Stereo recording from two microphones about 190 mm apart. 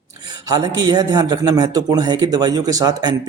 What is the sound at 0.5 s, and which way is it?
Speech, 20° right (ahead or behind).